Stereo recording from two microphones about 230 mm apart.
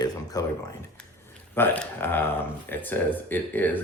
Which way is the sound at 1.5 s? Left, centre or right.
Centre.